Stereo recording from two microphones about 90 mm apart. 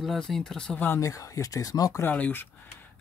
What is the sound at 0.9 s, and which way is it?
Speech, 35° left (ahead or behind).